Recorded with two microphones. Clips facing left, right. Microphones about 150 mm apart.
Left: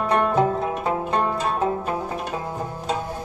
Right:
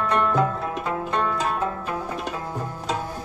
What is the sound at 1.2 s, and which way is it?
Zither, 30° left (ahead or behind).